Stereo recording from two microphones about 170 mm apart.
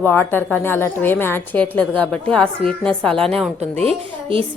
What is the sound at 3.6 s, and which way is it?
Speech, 40° right (ahead or behind).